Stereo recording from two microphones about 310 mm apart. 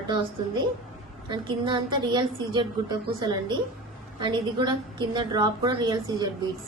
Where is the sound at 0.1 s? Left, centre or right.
Centre.